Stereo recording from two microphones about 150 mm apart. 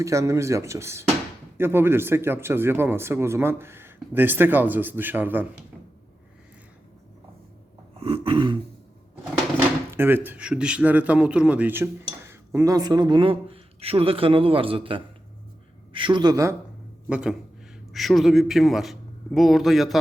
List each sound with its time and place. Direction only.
0.0 s speech: 20° right (ahead or behind)
7.9 s a man's voice: 40° right (ahead or behind)
9.9 s a man's voice: 15° right (ahead or behind)
17.1 s a man's voice: 5° right (ahead or behind)